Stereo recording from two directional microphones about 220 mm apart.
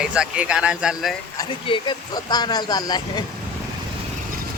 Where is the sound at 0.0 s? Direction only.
5° right (ahead or behind).